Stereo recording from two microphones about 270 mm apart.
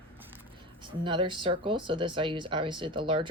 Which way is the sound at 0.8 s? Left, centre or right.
Centre.